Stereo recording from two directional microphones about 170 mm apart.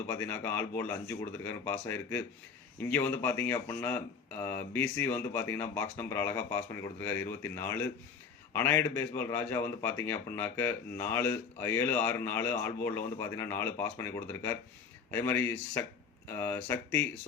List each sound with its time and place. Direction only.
0.1 s speech: 15° left (ahead or behind)